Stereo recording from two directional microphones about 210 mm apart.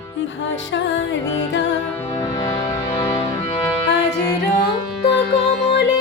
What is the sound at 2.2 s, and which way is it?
Music, 20° left (ahead or behind).